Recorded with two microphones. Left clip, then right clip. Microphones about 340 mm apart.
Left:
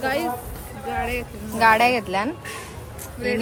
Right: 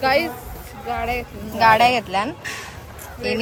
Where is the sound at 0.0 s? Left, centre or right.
Centre.